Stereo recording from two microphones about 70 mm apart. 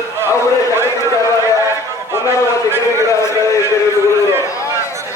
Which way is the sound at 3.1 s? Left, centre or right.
Left.